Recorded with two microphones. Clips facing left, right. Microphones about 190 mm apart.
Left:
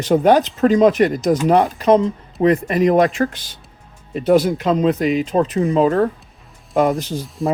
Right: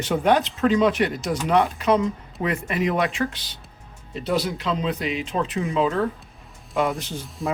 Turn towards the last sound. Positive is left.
turn(degrees=40)  # may be behind; listen again after turning